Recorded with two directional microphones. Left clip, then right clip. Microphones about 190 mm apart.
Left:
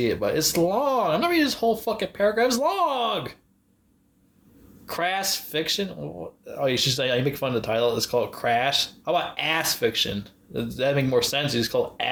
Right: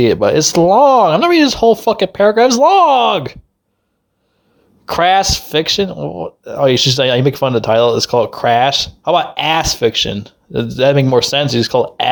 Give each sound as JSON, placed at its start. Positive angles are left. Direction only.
{"t": 0.0, "sound": "speech", "side_deg": -45}
{"t": 4.9, "sound": "speech", "side_deg": -45}